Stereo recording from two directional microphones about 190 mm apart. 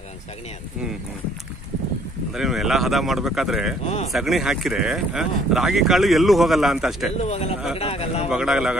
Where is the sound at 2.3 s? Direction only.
Centre (ahead or behind).